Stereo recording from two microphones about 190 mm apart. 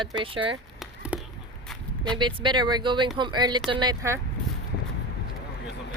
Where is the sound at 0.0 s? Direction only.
25° right (ahead or behind).